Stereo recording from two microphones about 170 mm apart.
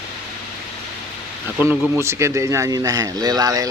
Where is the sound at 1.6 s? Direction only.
15° right (ahead or behind).